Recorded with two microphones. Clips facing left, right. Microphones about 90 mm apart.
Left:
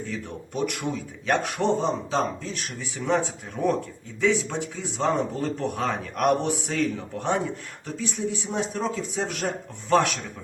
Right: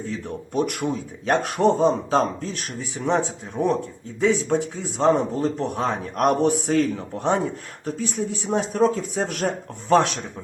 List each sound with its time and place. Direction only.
0.0 s a sound: 35° right (ahead or behind)
1.3 s speech: 40° right (ahead or behind); by 3.8 s 25° right (ahead or behind)
4.2 s speech: 40° right (ahead or behind)
9.9 s speech: 30° right (ahead or behind)